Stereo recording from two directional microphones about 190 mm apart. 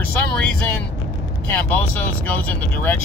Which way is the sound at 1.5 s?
10° left (ahead or behind).